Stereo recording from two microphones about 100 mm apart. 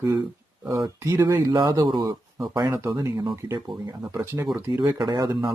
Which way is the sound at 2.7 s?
25° right (ahead or behind).